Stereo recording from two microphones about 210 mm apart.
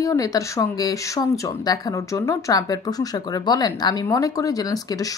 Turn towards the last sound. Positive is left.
turn(degrees=15)  # may be behind; listen again after turning